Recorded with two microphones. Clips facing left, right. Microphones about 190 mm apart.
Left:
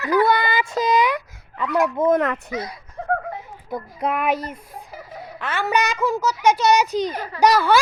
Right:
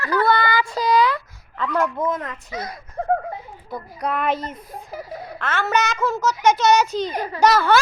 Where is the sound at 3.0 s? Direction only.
45° right (ahead or behind).